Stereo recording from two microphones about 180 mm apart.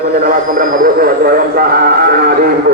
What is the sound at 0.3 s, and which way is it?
A man's voice, 50° right (ahead or behind).